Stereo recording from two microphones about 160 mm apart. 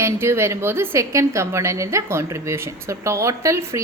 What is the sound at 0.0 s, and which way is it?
A woman's voice, 15° right (ahead or behind).